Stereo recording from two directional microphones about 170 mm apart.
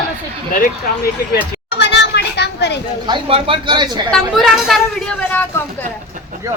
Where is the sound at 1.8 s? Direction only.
90° left.